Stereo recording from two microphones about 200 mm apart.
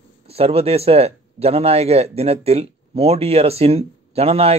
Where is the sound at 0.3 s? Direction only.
30° right (ahead or behind).